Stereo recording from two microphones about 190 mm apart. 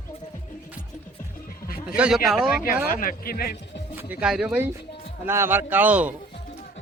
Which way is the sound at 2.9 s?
45° left (ahead or behind).